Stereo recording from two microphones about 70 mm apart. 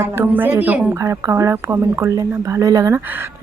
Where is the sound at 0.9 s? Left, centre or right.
Right.